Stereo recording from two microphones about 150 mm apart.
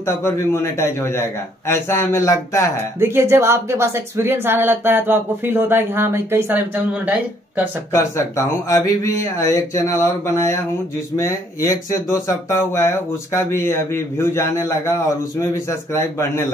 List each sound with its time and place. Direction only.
0.0 s speech: 20° left (ahead or behind)
3.0 s speech: 15° right (ahead or behind)
7.9 s speech: 20° left (ahead or behind)